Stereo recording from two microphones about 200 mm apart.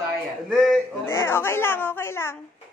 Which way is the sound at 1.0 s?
10° left (ahead or behind).